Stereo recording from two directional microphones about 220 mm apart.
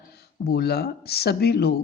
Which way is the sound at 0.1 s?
45° left (ahead or behind).